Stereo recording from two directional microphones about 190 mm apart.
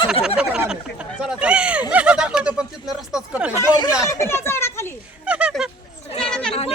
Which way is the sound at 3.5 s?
15° left (ahead or behind).